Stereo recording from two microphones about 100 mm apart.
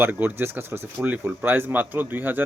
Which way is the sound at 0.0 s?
20° right (ahead or behind).